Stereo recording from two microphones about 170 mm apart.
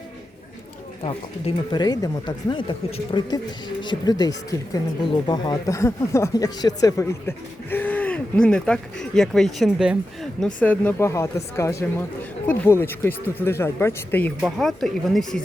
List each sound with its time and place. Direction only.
1.0 s speech: 30° left (ahead or behind); by 10.0 s 5° right (ahead or behind)
10.4 s speech: 10° left (ahead or behind)